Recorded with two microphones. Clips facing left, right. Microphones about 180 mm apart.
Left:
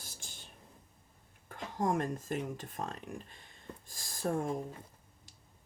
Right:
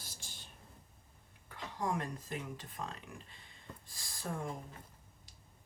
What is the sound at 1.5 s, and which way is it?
Speech, 45° left (ahead or behind).